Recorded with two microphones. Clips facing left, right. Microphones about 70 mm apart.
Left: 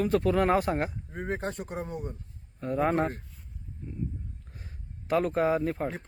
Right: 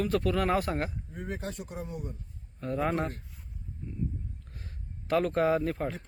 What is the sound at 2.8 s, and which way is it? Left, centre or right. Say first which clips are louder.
Speech: left 4 dB; left.